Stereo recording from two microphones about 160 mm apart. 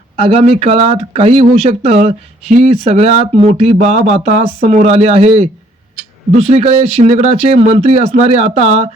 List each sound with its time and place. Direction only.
0.2 s speech: 35° right (ahead or behind)